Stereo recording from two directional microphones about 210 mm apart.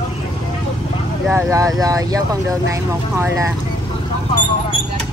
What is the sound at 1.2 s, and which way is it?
Speech, 15° right (ahead or behind).